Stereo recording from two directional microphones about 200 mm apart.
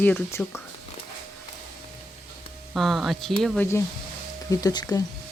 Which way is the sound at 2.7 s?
Centre (ahead or behind).